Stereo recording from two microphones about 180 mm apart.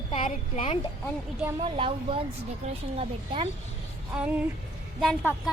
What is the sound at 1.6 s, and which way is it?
A woman's voice, 30° right (ahead or behind).